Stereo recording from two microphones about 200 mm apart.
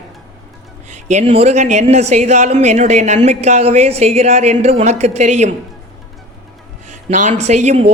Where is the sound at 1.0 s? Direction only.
30° right (ahead or behind).